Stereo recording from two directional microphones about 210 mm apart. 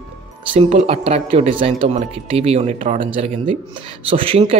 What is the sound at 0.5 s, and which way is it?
Speech, 30° right (ahead or behind).